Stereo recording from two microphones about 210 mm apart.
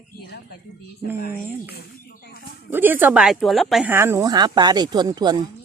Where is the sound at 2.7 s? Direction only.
10° right (ahead or behind).